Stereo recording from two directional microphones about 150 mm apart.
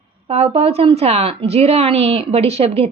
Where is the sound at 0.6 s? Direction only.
40° right (ahead or behind).